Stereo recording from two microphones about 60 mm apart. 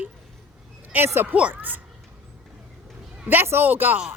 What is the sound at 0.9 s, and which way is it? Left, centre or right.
Speech, right.